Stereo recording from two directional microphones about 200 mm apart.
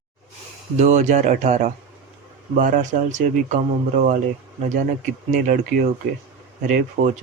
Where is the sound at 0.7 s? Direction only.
35° right (ahead or behind).